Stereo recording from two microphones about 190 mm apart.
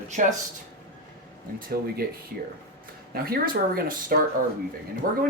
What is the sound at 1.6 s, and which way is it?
Speech, 50° right (ahead or behind).